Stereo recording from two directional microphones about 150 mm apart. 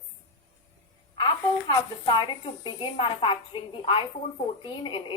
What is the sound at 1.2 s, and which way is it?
A woman's voice, 30° left (ahead or behind).